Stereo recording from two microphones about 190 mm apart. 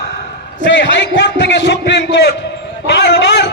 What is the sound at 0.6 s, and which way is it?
A man's voice, 75° left (ahead or behind).